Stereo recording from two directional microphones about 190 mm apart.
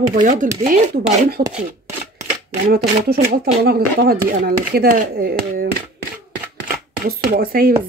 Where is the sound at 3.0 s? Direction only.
55° right (ahead or behind).